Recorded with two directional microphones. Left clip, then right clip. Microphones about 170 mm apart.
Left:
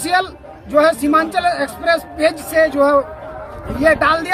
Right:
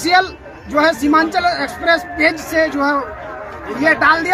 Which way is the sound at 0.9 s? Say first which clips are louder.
Right 1 dB; 25° left (ahead or behind).